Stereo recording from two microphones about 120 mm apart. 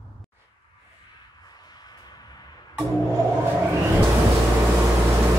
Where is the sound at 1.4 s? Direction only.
35° left (ahead or behind).